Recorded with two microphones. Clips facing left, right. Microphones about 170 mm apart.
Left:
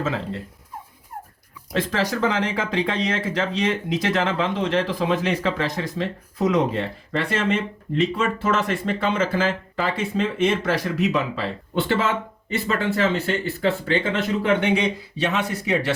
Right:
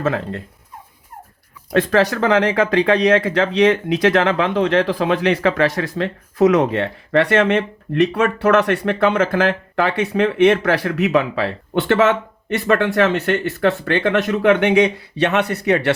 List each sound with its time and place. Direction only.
0.0 s speech: 60° right (ahead or behind)
1.7 s speech: 65° right (ahead or behind)